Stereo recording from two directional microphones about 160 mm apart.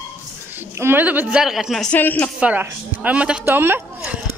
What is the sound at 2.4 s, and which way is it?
A woman's voice, 10° right (ahead or behind).